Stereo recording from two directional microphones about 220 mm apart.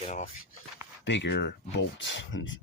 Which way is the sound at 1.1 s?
55° left (ahead or behind).